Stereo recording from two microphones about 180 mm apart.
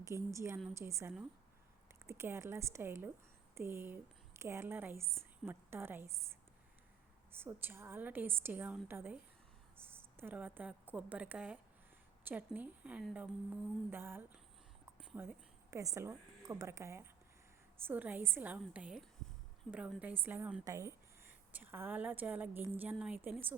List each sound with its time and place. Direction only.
0.0 s a woman's voice: 15° right (ahead or behind)
7.3 s a woman's voice: 10° right (ahead or behind)